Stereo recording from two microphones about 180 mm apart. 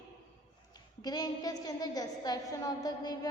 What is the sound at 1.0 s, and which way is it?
A woman's voice, 20° left (ahead or behind).